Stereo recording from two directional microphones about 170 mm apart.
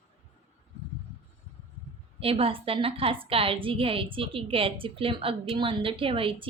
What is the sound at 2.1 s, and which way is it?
A woman's voice, 35° right (ahead or behind).